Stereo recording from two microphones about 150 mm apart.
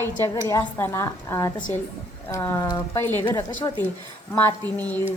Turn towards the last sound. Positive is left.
turn(degrees=10)  # may be behind; listen again after turning